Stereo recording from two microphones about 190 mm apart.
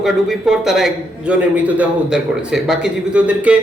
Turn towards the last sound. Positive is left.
turn(degrees=-5)  # may be behind; listen again after turning